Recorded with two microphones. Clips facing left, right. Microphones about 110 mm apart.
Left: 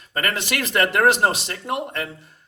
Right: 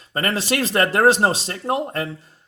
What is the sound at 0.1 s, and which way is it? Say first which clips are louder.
A man's voice: right 3 dB; 30° right (ahead or behind).